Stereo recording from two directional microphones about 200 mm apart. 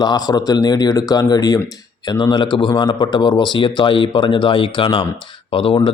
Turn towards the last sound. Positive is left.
turn(degrees=25)  # may be behind; listen again after turning